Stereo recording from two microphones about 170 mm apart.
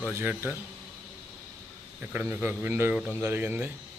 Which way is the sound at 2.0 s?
10° right (ahead or behind).